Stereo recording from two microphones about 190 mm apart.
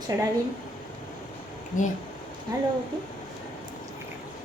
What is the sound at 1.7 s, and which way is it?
Speech, 40° left (ahead or behind).